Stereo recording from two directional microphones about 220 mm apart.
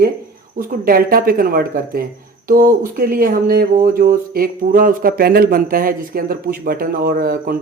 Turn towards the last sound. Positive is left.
turn(degrees=-40)  # may be behind; listen again after turning